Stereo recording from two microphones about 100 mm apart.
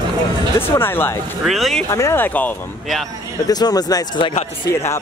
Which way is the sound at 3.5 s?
40° left (ahead or behind).